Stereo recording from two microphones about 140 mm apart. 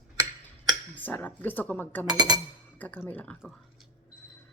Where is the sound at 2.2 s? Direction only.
30° right (ahead or behind).